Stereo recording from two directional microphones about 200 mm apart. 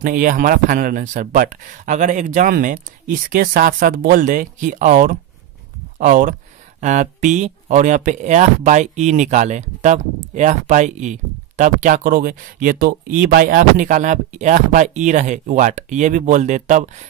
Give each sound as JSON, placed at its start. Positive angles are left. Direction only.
{"t": 0.0, "sound": "speech", "side_deg": -40}